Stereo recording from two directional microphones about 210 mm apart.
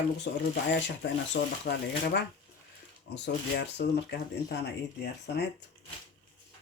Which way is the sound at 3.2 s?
55° left (ahead or behind).